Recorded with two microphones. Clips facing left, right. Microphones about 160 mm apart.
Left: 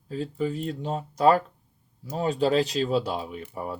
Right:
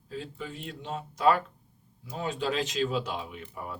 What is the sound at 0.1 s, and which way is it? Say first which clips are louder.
Speech: left 10 dB; 40° left (ahead or behind).